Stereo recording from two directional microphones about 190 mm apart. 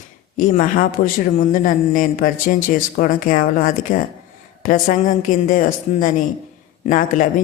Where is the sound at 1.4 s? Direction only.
45° left (ahead or behind).